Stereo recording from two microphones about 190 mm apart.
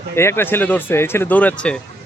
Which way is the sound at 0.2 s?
15° left (ahead or behind).